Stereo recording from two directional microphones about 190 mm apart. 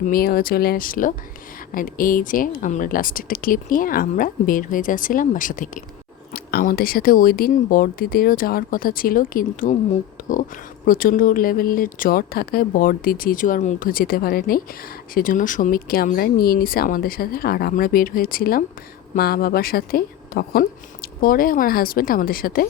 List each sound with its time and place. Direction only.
0.1 s speech: 50° left (ahead or behind)